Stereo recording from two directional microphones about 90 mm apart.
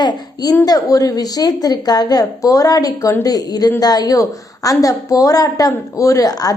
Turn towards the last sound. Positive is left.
turn(degrees=45)  # may be behind; listen again after turning